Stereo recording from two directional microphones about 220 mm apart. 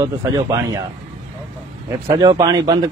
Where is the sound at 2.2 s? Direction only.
15° right (ahead or behind).